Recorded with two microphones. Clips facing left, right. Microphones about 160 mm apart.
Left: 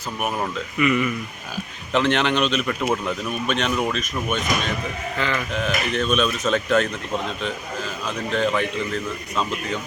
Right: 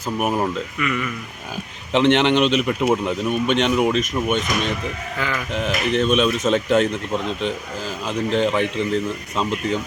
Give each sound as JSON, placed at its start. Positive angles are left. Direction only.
{"t": 0.2, "sound": "a man's voice", "side_deg": -20}
{"t": 0.8, "sound": "speech", "side_deg": 10}
{"t": 1.9, "sound": "a man's voice", "side_deg": -25}
{"t": 8.0, "sound": "a man's voice", "side_deg": -25}